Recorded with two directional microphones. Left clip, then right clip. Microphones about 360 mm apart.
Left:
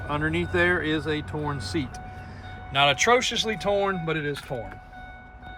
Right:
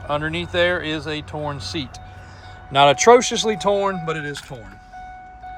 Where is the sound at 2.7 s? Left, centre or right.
Centre.